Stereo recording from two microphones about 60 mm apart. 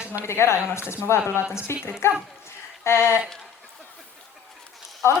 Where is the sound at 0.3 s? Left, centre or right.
Left.